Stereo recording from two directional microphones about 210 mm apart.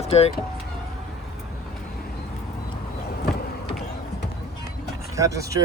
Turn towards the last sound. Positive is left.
turn(degrees=-15)  # may be behind; listen again after turning